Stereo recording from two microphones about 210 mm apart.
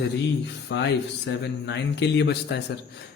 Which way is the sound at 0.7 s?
55° left (ahead or behind).